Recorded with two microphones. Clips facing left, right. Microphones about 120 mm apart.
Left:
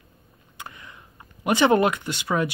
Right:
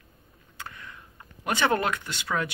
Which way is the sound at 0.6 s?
15° left (ahead or behind).